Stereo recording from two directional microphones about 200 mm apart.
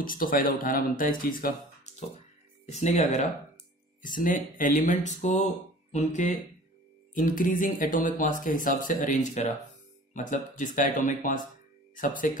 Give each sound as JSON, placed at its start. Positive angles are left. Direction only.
{"t": 0.0, "sound": "speech", "side_deg": 45}
{"t": 1.9, "sound": "music", "side_deg": 35}
{"t": 2.6, "sound": "speech", "side_deg": 35}